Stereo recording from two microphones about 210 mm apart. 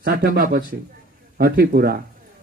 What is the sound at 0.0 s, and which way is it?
Speech, 45° right (ahead or behind).